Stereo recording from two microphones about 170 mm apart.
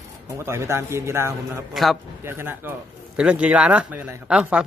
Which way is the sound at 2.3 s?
15° right (ahead or behind).